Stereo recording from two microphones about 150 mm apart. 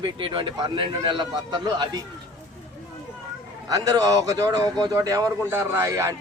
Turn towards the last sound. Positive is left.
turn(degrees=-20)  # may be behind; listen again after turning